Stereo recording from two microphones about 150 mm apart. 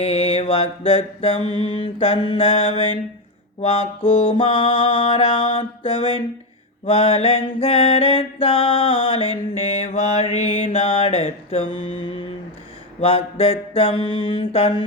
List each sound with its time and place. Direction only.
0.0 s mantra: 45° left (ahead or behind)
13.0 s mantra: 40° left (ahead or behind)